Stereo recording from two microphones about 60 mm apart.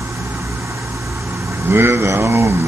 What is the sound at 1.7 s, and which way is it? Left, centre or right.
Speech, right.